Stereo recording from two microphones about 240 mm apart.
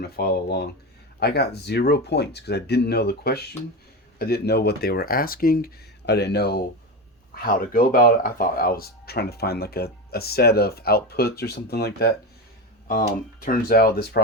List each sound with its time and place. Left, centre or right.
0.0 s speech: left